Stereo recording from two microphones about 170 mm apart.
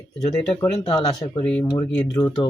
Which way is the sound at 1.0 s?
25° left (ahead or behind).